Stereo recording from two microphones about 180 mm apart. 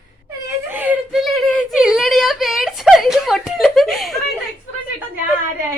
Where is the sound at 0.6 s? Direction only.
10° right (ahead or behind).